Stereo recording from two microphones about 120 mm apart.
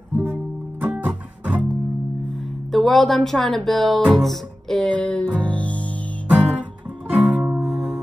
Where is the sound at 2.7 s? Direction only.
Centre (ahead or behind).